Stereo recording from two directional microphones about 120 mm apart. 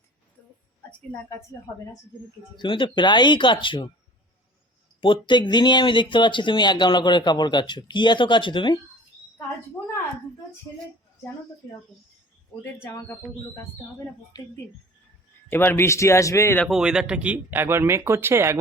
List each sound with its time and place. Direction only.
0.9 s a woman's voice: 15° left (ahead or behind)
2.6 s speech: 40° left (ahead or behind)
4.9 s speech: 45° left (ahead or behind)
12.8 s speech: 20° left (ahead or behind)
14.3 s speech: 35° left (ahead or behind)
15.4 s speech: 15° left (ahead or behind)
16.6 s speech: 5° right (ahead or behind); by 18.6 s 20° right (ahead or behind)